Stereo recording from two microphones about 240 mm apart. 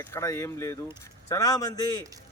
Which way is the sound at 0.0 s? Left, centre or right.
Centre.